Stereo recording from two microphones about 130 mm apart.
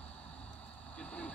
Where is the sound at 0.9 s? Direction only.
10° left (ahead or behind).